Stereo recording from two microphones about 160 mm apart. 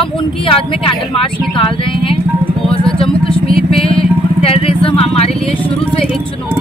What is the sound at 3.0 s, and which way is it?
Vehicle, 35° left (ahead or behind).